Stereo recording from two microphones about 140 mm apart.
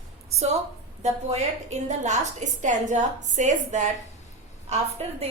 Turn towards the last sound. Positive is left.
turn(degrees=-45)  # may be behind; listen again after turning